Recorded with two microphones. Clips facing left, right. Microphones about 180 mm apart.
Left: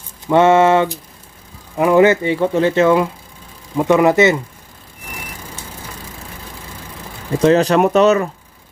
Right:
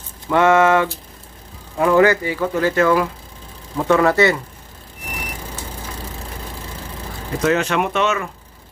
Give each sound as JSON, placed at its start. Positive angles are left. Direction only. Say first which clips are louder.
{"t": 0.3, "sound": "speech", "louder": "left 3 dB", "side_deg": 25}
{"t": 7.3, "sound": "speech", "louder": "left 6 dB", "side_deg": 35}